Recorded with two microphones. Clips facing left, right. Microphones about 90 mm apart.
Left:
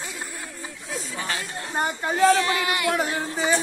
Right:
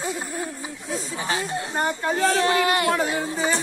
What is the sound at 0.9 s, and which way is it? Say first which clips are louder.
Speech: right 3 dB; 25° right (ahead or behind).